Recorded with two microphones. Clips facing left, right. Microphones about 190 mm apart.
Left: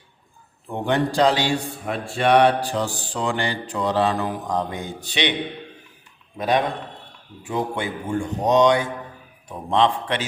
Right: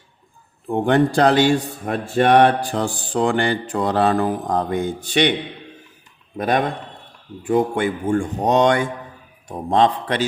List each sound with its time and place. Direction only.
0.9 s a man's voice: 55° right (ahead or behind)
6.3 s speech: 50° right (ahead or behind)
9.5 s a man's voice: 40° right (ahead or behind)